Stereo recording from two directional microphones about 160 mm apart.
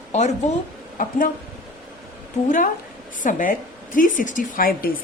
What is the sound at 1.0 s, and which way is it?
Speech, 60° left (ahead or behind).